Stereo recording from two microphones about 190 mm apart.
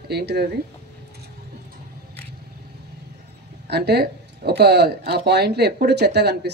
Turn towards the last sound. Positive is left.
turn(degrees=-60)  # may be behind; listen again after turning